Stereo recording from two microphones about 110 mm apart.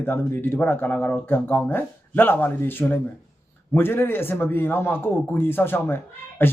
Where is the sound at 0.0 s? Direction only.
20° left (ahead or behind).